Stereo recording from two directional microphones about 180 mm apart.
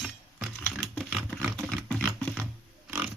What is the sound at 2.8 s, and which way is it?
Pig, 10° right (ahead or behind).